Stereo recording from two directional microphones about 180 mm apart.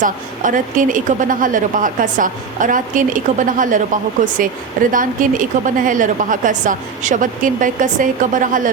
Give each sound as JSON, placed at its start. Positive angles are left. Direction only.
{"t": 0.0, "sound": "speech", "side_deg": -45}